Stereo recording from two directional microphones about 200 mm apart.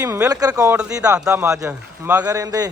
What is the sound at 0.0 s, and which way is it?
Speech, 15° right (ahead or behind).